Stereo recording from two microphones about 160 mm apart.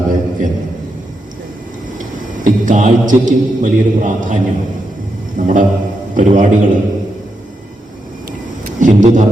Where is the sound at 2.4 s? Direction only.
55° right (ahead or behind).